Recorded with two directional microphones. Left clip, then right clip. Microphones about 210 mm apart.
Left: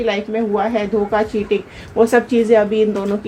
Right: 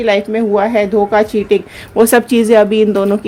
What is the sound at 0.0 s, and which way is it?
Speech, 50° right (ahead or behind).